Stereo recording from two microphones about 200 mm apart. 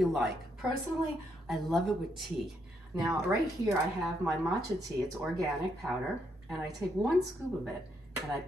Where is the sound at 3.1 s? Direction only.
15° right (ahead or behind).